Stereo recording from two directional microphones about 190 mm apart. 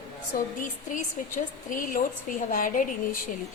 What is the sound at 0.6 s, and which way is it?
A woman's voice, 45° left (ahead or behind).